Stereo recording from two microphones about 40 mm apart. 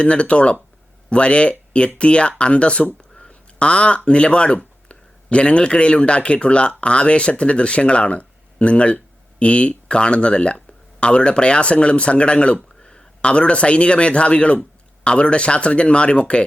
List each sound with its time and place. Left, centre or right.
0.0 s speech: left